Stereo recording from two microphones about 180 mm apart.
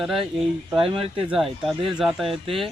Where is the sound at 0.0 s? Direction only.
5° right (ahead or behind).